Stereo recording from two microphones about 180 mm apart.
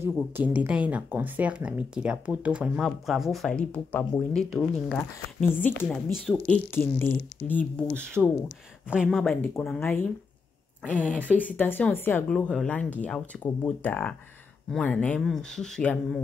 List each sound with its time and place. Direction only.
0.3 s speech: 10° right (ahead or behind); by 7.8 s 10° left (ahead or behind)
8.2 s speech: 5° right (ahead or behind)
11.1 s speech: 10° right (ahead or behind)
11.3 s speech: 10° left (ahead or behind)